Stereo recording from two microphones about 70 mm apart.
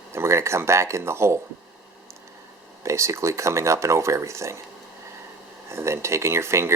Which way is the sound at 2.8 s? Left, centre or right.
Right.